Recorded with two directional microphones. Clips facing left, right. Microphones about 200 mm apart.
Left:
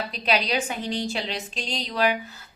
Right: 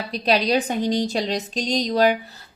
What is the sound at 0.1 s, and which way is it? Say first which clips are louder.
Speech: right 7 dB; 40° right (ahead or behind).